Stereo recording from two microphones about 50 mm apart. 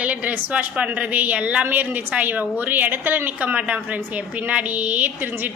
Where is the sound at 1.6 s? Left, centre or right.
Right.